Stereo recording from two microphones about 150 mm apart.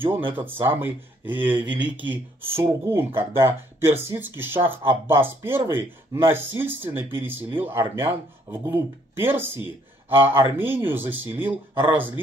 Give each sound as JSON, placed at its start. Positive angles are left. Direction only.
{"t": 0.3, "sound": "speech", "side_deg": -15}